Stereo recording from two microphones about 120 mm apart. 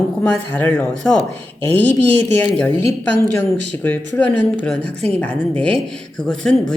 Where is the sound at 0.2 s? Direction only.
15° left (ahead or behind).